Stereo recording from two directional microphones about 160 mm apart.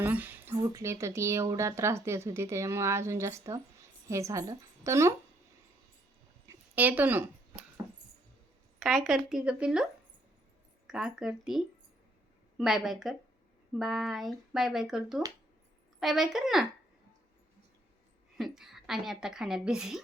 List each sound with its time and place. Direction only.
0.0 s a woman's voice: 10° right (ahead or behind)
6.7 s speech: 10° right (ahead or behind)
8.8 s a woman's voice: centre (ahead or behind)
18.3 s a woman's voice: centre (ahead or behind)